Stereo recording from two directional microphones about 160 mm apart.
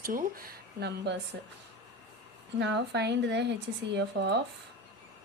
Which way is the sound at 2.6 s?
90° right.